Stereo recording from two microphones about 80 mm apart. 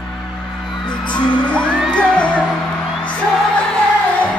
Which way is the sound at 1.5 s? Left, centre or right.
Centre.